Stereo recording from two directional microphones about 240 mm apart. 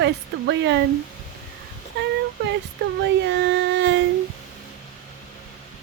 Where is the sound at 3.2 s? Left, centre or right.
Right.